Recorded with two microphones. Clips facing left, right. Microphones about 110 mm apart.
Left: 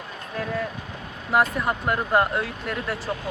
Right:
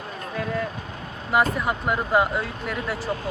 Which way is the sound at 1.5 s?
Centre (ahead or behind).